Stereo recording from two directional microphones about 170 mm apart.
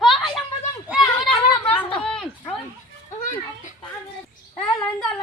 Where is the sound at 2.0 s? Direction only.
5° left (ahead or behind).